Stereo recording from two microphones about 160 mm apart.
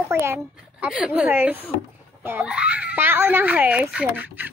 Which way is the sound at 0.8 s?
5° right (ahead or behind).